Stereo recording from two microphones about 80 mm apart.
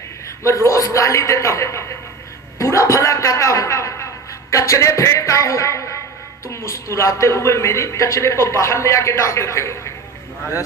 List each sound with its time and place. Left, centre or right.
0.5 s a man's voice: left